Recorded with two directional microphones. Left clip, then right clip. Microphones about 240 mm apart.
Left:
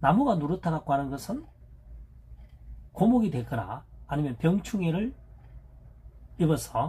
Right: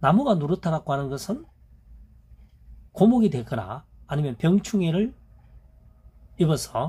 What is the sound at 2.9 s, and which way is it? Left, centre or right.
Speech, right.